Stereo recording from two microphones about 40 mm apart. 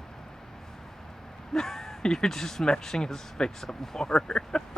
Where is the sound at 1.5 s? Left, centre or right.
Centre.